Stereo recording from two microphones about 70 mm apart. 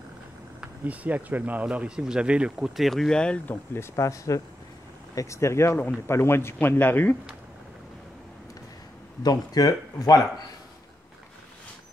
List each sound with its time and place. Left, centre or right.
0.6 s speech: right
2.7 s speech: centre
3.4 s speech: left
3.9 s speech: left
9.2 s speech: left